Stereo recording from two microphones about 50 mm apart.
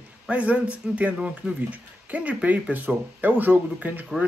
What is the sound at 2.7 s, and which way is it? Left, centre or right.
Speech, right.